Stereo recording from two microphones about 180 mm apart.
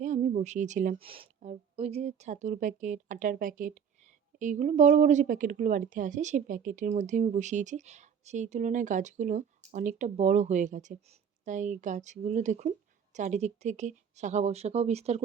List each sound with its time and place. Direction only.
0.0 s a woman's voice: 45° right (ahead or behind)